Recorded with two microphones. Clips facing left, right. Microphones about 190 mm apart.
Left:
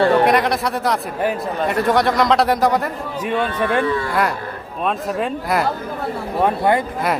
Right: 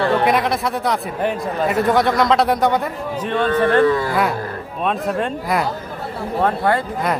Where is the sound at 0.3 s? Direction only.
Centre (ahead or behind).